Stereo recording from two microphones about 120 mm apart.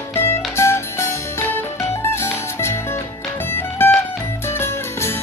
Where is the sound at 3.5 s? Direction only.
20° left (ahead or behind).